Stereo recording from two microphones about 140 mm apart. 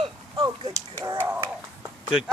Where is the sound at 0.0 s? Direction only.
35° right (ahead or behind).